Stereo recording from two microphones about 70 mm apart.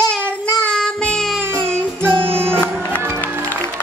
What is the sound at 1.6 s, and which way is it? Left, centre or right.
Music, right.